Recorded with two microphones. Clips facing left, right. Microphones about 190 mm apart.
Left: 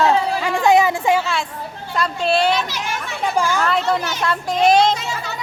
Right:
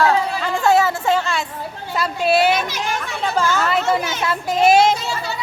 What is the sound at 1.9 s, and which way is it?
Speech, 5° right (ahead or behind).